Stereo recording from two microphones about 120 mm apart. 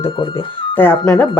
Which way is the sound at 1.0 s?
5° left (ahead or behind).